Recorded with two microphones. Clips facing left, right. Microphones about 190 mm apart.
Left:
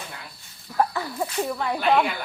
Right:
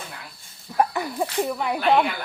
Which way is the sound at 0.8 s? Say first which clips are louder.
Right 2 dB; 15° right (ahead or behind).